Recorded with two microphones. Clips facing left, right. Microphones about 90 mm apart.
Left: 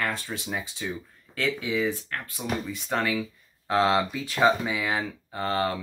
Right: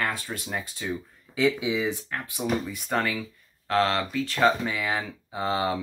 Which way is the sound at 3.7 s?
15° left (ahead or behind).